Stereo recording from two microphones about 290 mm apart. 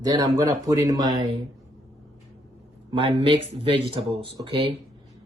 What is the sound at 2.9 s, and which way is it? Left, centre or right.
Speech, centre.